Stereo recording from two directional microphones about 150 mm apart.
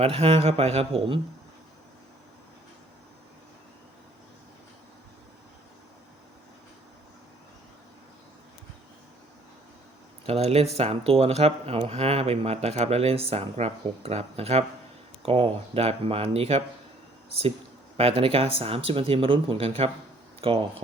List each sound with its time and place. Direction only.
0.0 s speech: 40° right (ahead or behind)
10.2 s speech: 45° right (ahead or behind)
17.9 s speech: 40° right (ahead or behind)